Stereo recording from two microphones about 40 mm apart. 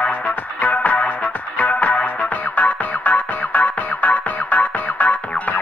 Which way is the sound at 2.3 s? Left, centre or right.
Left.